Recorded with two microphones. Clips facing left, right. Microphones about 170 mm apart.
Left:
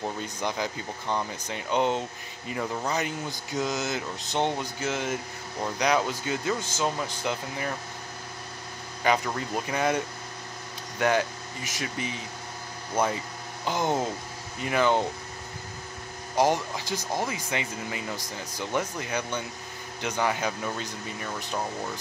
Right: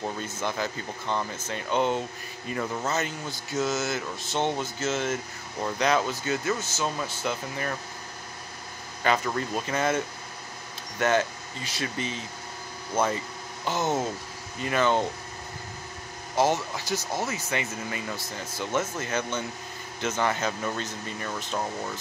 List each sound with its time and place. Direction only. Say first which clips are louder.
0.0 s speech: even; 15° left (ahead or behind)
9.0 s speech: even; 15° left (ahead or behind)
16.3 s speech: even; 15° left (ahead or behind)